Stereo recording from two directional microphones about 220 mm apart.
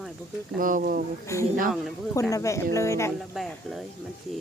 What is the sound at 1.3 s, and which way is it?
Speech, 15° left (ahead or behind).